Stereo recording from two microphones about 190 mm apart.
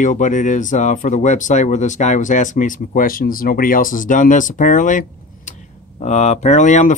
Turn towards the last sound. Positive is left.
turn(degrees=40)  # may be behind; listen again after turning